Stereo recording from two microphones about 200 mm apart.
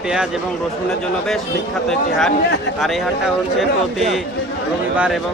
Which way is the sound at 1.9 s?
Centre (ahead or behind).